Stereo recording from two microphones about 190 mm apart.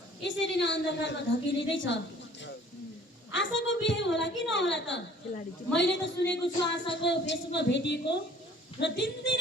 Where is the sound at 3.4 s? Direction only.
75° left (ahead or behind).